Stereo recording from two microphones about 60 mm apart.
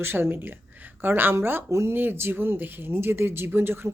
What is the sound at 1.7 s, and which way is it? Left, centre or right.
Speech, right.